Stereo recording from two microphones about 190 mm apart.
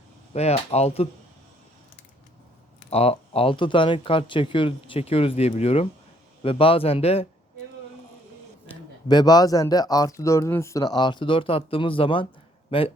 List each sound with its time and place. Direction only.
0.3 s speech: 35° left (ahead or behind)
2.9 s speech: 30° left (ahead or behind)
9.0 s speech: 20° left (ahead or behind)